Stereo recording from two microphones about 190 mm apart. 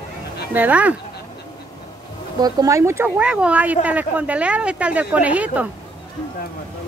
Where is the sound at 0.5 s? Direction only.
10° right (ahead or behind).